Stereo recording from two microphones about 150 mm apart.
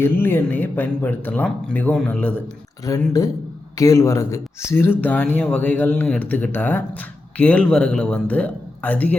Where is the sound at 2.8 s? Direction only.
20° left (ahead or behind).